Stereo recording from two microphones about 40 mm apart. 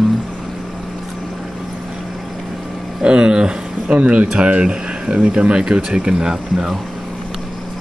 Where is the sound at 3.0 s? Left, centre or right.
Right.